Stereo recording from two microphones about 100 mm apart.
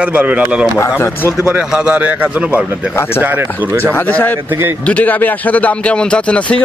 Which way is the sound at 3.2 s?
20° right (ahead or behind).